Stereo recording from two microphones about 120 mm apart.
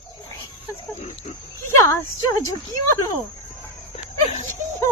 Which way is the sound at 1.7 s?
25° left (ahead or behind).